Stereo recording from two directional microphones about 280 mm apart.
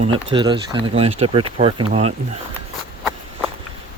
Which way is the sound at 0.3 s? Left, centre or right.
Centre.